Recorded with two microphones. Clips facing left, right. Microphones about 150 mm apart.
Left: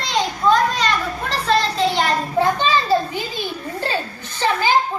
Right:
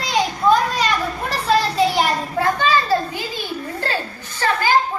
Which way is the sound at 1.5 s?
10° right (ahead or behind).